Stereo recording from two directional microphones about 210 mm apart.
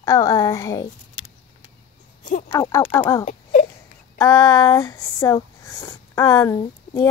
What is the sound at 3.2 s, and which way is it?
Baby cry, 35° left (ahead or behind).